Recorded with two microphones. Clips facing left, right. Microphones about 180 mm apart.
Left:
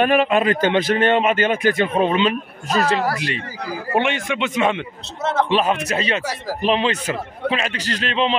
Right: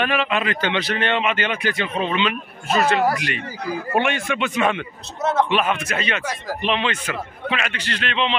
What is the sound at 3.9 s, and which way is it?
Speech, 20° left (ahead or behind).